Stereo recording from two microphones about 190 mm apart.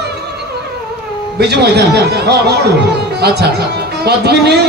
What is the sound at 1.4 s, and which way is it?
Speech, 60° right (ahead or behind).